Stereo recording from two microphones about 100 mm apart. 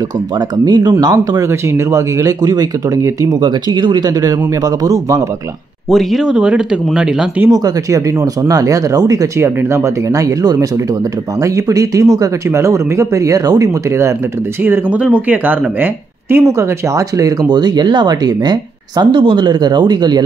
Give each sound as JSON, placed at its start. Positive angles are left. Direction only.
{"t": 0.7, "sound": "speech", "side_deg": -45}
{"t": 1.1, "sound": "speech", "side_deg": -30}
{"t": 5.9, "sound": "speech", "side_deg": 0}
{"t": 7.5, "sound": "speech", "side_deg": -40}
{"t": 14.6, "sound": "speech", "side_deg": -15}